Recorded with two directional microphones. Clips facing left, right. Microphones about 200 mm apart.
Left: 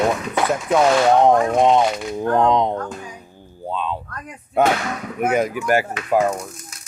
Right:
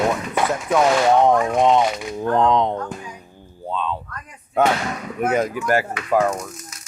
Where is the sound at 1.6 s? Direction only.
15° left (ahead or behind).